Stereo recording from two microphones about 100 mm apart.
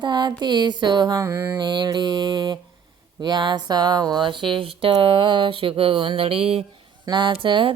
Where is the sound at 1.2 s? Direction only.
25° right (ahead or behind).